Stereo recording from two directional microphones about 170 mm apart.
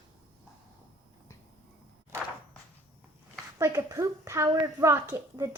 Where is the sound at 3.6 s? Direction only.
20° right (ahead or behind).